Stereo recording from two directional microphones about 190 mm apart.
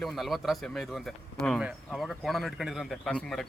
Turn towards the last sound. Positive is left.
turn(degrees=5)  # may be behind; listen again after turning